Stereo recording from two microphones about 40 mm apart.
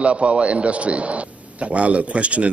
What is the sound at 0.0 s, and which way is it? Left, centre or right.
Speech, right.